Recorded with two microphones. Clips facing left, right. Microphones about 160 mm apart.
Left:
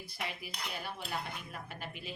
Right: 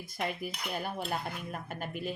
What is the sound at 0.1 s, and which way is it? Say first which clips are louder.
Speech: right 8 dB; 50° right (ahead or behind).